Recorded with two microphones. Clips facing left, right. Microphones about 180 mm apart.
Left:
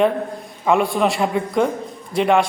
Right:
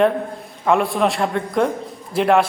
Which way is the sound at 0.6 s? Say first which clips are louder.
Even; centre (ahead or behind).